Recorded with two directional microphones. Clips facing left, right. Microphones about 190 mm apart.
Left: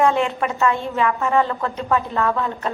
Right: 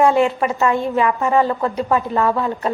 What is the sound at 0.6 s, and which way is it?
A woman's voice, 15° right (ahead or behind).